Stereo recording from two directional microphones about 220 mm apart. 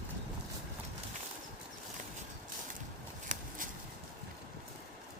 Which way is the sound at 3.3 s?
35° right (ahead or behind).